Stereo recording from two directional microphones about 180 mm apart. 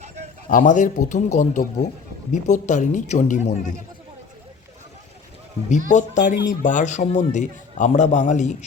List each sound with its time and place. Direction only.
0.4 s speech: 45° left (ahead or behind)
5.9 s speech: 45° left (ahead or behind)